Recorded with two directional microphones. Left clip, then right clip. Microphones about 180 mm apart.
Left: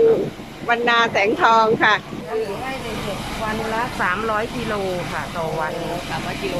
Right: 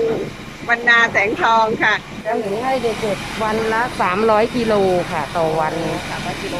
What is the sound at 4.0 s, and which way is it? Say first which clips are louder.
Speech: right 7 dB; 20° right (ahead or behind).